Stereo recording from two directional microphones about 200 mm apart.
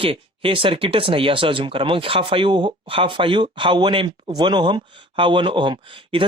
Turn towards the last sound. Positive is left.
turn(degrees=-25)  # may be behind; listen again after turning